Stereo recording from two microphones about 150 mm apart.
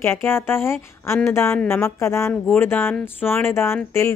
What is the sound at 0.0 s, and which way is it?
A woman's voice, 15° left (ahead or behind).